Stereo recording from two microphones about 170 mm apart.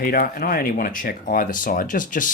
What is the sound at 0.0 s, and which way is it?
Speech, 60° left (ahead or behind).